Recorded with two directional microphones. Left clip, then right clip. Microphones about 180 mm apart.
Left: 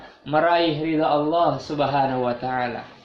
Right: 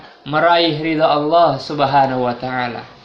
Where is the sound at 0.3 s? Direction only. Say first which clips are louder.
Right 5 dB; 20° right (ahead or behind).